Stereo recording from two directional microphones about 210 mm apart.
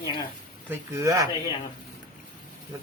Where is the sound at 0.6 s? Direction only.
15° right (ahead or behind).